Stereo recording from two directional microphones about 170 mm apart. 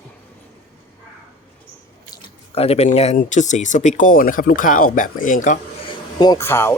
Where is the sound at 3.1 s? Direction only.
45° left (ahead or behind).